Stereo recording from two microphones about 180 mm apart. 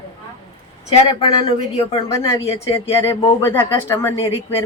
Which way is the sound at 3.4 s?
15° left (ahead or behind).